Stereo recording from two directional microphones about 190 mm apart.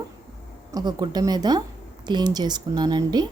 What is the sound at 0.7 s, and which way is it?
A woman's voice, 20° right (ahead or behind).